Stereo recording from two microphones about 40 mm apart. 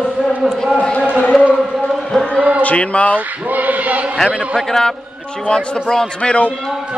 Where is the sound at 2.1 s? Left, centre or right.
Left.